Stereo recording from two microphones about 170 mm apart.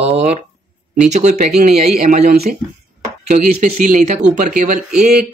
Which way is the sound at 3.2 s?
45° right (ahead or behind).